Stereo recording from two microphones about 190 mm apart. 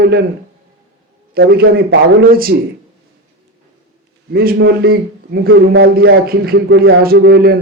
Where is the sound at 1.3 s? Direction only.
55° right (ahead or behind).